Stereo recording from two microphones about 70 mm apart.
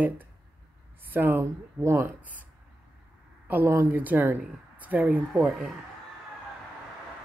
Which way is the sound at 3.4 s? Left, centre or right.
Right.